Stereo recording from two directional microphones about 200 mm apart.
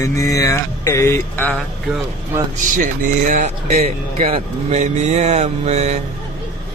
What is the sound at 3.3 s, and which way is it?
Speech, 35° right (ahead or behind).